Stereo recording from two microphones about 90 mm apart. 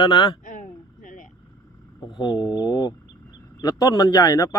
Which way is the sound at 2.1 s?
55° left (ahead or behind).